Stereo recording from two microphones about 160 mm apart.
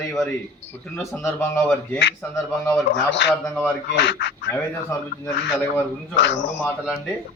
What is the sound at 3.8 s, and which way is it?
Speech, 90° left.